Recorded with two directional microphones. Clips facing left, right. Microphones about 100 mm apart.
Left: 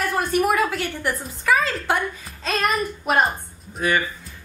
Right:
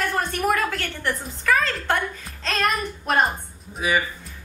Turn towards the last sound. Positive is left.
turn(degrees=-5)  # may be behind; listen again after turning